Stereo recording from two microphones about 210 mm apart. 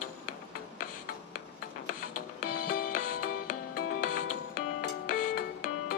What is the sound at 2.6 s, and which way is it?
Music, 40° left (ahead or behind).